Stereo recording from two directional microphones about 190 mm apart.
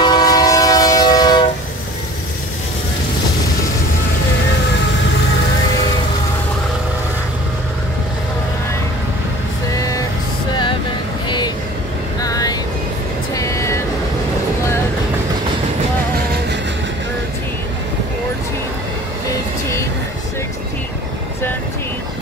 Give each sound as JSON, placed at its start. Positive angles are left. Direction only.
{"t": 0.0, "sound": "train", "side_deg": 20}
{"t": 9.8, "sound": "vehicle", "side_deg": 20}
{"t": 11.2, "sound": "vehicle", "side_deg": 25}